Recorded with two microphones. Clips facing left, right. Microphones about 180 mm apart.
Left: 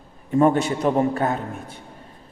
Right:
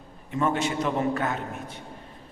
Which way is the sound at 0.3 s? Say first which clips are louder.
Left 8 dB; 40° left (ahead or behind).